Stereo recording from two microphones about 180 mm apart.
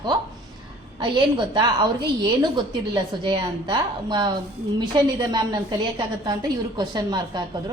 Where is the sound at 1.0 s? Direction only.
25° right (ahead or behind).